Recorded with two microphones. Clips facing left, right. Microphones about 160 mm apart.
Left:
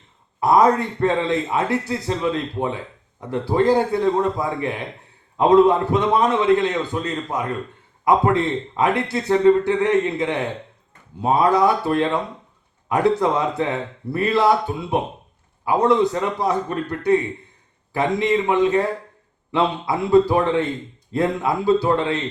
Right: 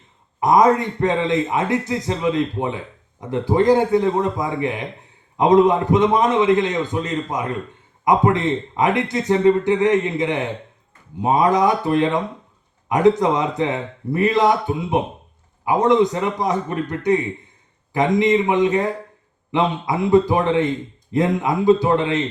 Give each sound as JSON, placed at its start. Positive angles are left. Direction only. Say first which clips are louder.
{"t": 0.3, "sound": "a man's voice", "louder": "right 1 dB", "side_deg": -15}